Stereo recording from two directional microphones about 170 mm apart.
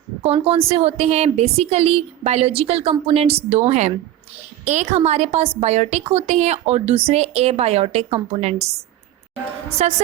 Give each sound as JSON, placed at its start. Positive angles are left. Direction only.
{"t": 0.2, "sound": "a woman's voice", "side_deg": -35}